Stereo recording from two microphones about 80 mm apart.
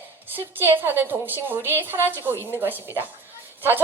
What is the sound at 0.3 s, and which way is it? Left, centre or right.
A woman's voice, right.